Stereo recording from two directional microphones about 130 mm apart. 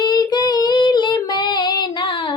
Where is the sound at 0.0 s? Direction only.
35° left (ahead or behind).